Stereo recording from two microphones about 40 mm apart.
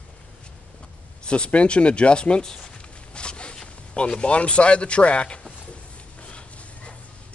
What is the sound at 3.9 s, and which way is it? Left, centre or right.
Speech, left.